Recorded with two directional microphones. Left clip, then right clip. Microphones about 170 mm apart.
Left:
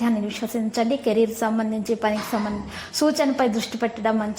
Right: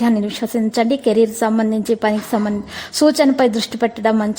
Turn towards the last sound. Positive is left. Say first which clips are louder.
# right 6 dB
turn(degrees=-35)  # may be behind; listen again after turning